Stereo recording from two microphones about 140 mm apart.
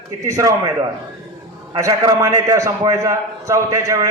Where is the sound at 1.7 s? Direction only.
25° right (ahead or behind).